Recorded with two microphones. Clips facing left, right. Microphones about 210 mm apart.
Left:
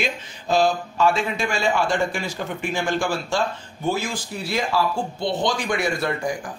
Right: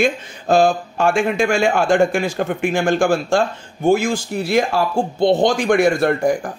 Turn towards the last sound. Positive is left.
turn(degrees=-50)  # may be behind; listen again after turning